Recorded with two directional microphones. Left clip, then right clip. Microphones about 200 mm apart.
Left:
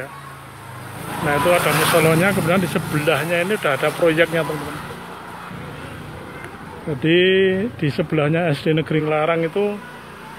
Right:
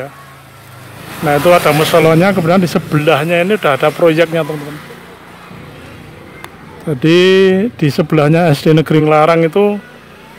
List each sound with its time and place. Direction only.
1.4 s speech: 40° right (ahead or behind)
7.0 s speech: 45° right (ahead or behind)